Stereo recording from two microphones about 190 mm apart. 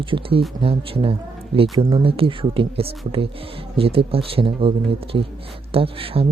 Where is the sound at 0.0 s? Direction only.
30° right (ahead or behind).